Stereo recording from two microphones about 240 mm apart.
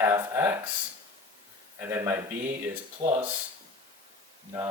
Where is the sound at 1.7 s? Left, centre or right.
Centre.